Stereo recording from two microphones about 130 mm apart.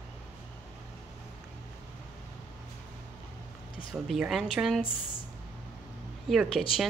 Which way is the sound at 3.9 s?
Centre (ahead or behind).